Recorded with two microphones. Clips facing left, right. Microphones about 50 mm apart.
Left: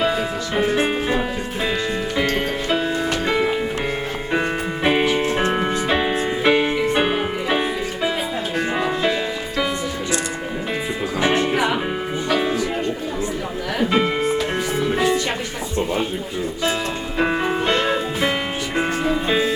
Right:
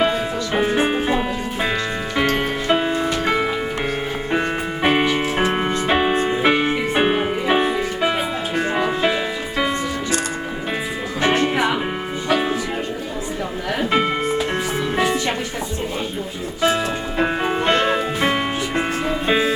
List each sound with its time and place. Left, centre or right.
0.0 s music: right
2.1 s music: centre
4.8 s music: centre
8.5 s music: centre
11.4 s music: centre
13.7 s music: centre
17.2 s music: centre